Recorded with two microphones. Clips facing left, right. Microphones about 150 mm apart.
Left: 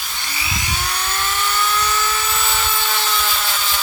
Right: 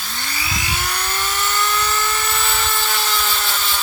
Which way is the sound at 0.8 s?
Centre (ahead or behind).